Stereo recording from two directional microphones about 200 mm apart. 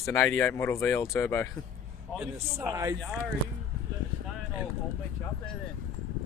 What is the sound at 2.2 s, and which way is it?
Speech, 10° right (ahead or behind).